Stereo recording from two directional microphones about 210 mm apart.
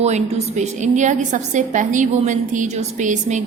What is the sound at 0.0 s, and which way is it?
A woman's voice, 30° right (ahead or behind).